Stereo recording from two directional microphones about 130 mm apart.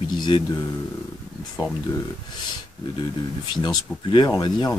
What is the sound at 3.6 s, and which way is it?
Speech, 35° left (ahead or behind).